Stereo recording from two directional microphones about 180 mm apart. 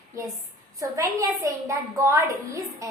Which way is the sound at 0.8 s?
20° right (ahead or behind).